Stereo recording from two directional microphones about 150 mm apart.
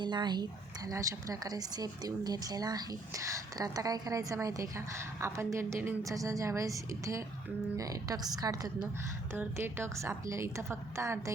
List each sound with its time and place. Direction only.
0.0 s a woman's voice: 30° right (ahead or behind)
9.3 s a woman's voice: 15° right (ahead or behind)